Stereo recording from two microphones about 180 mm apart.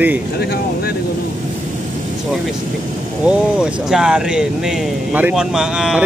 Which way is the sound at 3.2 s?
5° right (ahead or behind).